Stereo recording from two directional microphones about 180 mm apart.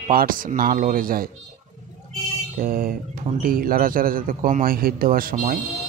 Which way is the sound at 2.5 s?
50° right (ahead or behind).